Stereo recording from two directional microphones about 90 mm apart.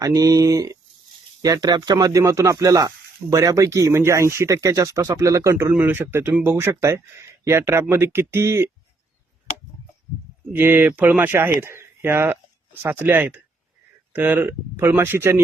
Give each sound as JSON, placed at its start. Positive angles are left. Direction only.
{"t": 0.0, "sound": "speech", "side_deg": -40}
{"t": 10.5, "sound": "speech", "side_deg": -20}